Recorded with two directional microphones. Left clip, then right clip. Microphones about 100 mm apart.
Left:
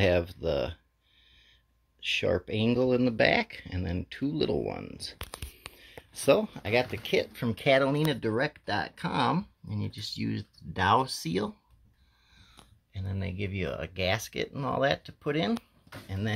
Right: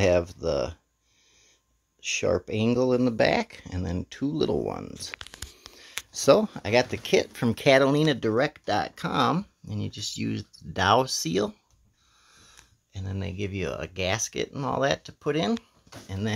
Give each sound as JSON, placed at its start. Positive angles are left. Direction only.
{"t": 0.0, "sound": "speech", "side_deg": -20}
{"t": 2.0, "sound": "speech", "side_deg": -20}
{"t": 5.7, "sound": "a sound", "side_deg": -30}
{"t": 6.1, "sound": "speech", "side_deg": -55}
{"t": 6.7, "sound": "speech", "side_deg": -85}
{"t": 12.4, "sound": "sniff", "side_deg": -40}
{"t": 13.0, "sound": "speech", "side_deg": -30}